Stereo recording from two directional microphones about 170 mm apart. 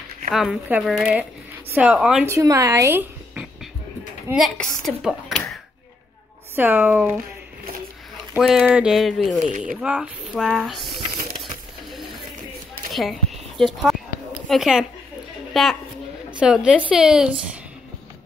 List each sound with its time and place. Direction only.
0.3 s a woman's voice: centre (ahead or behind)
2.2 s speech: 15° right (ahead or behind)
4.3 s a woman's voice: centre (ahead or behind)
6.5 s speech: 10° right (ahead or behind)
8.4 s a woman's voice: centre (ahead or behind)
12.9 s a woman's voice: centre (ahead or behind)